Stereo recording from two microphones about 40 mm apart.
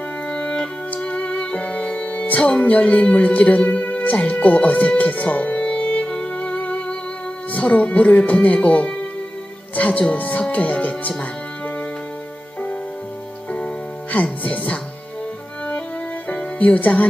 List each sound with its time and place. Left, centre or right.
0.3 s music: left
2.6 s speech: left
6.0 s music: left
7.5 s speech: left
13.5 s music: left
14.1 s speech: left
16.5 s speech: left